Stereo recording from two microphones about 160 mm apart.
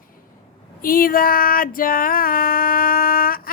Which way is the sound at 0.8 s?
65° left (ahead or behind).